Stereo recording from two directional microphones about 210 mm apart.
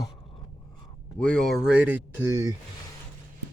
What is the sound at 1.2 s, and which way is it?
Speech, 5° left (ahead or behind).